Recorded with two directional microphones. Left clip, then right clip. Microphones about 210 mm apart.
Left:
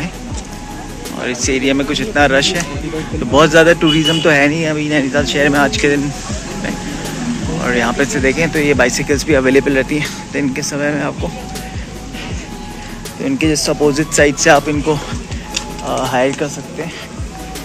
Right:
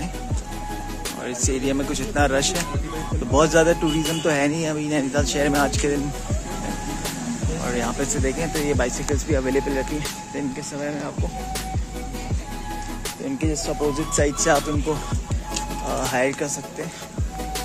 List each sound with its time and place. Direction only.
1.2 s speech: 20° right (ahead or behind)
3.8 s speech: 5° right (ahead or behind)
4.3 s speech: 20° right (ahead or behind)
7.6 s speech: 10° right (ahead or behind)
13.2 s speech: 5° right (ahead or behind)
15.9 s speech: 25° right (ahead or behind)